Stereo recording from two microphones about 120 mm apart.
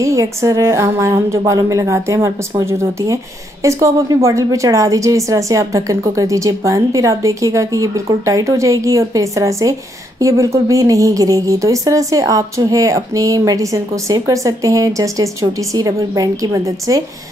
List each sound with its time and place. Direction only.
0.0 s speech: 25° right (ahead or behind)